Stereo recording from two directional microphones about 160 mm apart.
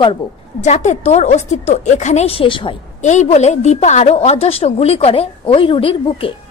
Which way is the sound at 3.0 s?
45° left (ahead or behind).